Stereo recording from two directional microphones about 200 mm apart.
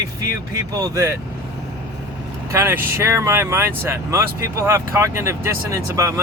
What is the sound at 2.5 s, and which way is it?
Speech, 10° right (ahead or behind).